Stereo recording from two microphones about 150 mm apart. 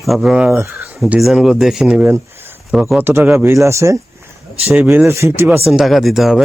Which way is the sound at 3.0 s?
15° right (ahead or behind).